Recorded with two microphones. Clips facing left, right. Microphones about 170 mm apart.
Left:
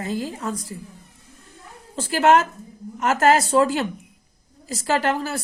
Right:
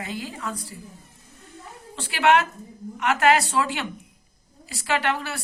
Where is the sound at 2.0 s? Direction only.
40° left (ahead or behind).